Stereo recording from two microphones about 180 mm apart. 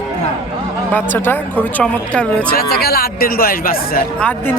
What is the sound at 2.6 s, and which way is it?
Speech, 60° left (ahead or behind).